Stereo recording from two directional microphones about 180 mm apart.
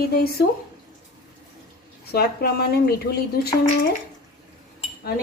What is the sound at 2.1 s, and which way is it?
A woman's voice, 60° left (ahead or behind).